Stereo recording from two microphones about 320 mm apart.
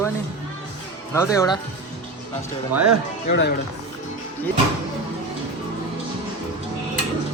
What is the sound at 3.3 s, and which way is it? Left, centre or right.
Speech, left.